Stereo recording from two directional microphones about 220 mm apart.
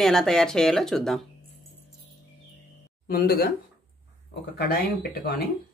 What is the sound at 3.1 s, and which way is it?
Speech, 45° left (ahead or behind).